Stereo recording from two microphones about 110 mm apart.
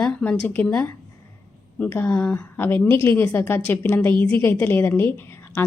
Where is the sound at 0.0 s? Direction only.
10° left (ahead or behind).